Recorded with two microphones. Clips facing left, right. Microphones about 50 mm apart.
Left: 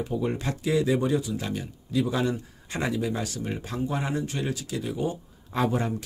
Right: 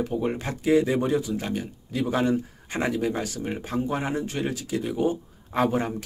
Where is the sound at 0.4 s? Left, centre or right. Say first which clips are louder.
Right 4 dB; centre.